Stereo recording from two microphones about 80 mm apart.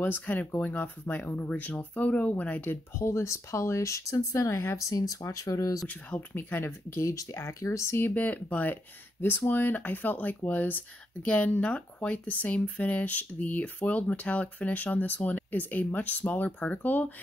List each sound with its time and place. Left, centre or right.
0.0 s speech: left
5.9 s speech: left
8.1 s speech: centre